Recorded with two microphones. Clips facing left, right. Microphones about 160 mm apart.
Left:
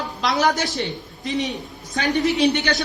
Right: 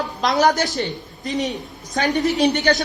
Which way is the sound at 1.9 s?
40° right (ahead or behind).